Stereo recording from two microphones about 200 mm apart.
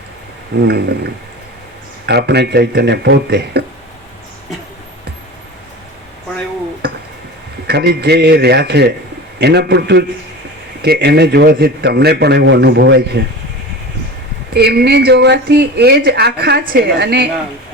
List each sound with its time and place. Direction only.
0.7 s a man's voice: 55° right (ahead or behind)
7.7 s a man's voice: 55° right (ahead or behind)
14.5 s speech: 55° right (ahead or behind)